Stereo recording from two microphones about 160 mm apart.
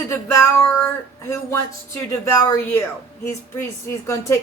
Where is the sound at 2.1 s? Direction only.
20° left (ahead or behind).